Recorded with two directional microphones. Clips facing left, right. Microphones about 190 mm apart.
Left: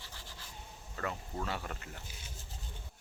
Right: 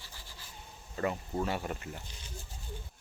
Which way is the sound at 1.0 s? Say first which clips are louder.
Right 6 dB; 20° right (ahead or behind).